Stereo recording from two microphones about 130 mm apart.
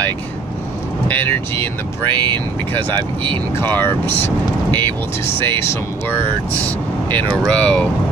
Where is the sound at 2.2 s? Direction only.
35° right (ahead or behind).